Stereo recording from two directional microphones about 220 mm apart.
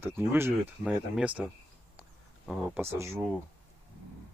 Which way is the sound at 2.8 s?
10° right (ahead or behind).